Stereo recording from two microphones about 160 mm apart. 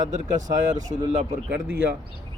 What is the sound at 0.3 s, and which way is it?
Speech, 50° right (ahead or behind).